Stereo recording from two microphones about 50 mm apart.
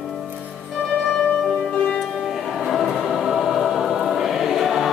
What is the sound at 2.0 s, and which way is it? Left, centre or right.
Choir, centre.